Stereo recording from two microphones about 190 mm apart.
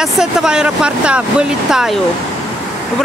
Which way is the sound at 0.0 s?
Centre (ahead or behind).